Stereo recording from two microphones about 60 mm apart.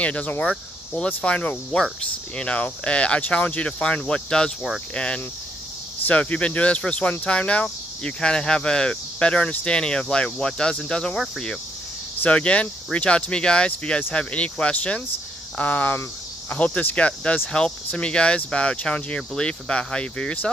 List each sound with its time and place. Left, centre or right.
0.0 s speech: left